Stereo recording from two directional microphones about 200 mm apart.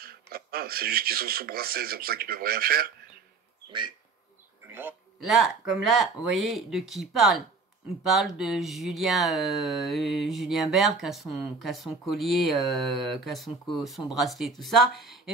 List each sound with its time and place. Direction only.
0.0 s speech: 50° right (ahead or behind)
4.6 s a sound: 10° right (ahead or behind)
5.2 s speech: centre (ahead or behind)